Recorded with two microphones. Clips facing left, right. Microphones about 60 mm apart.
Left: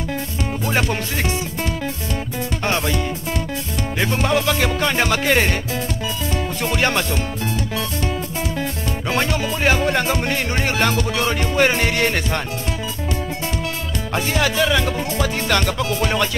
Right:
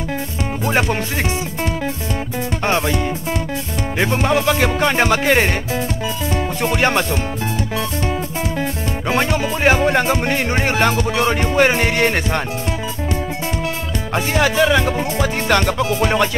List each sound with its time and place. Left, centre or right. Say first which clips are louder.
0.7 s music: right 4 dB; right
4.0 s music: right 3 dB; right
6.3 s speech: right 3 dB; right
9.1 s music: right 3 dB; centre
14.1 s music: right 3 dB; right